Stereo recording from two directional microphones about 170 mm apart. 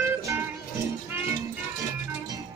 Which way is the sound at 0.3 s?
15° right (ahead or behind).